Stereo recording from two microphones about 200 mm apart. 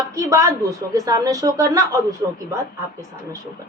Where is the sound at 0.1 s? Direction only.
15° right (ahead or behind).